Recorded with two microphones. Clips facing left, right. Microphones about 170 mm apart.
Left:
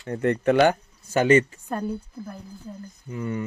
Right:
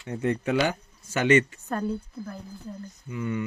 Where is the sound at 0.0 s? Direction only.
55° left (ahead or behind).